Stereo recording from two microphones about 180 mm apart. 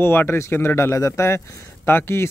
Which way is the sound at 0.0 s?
10° left (ahead or behind).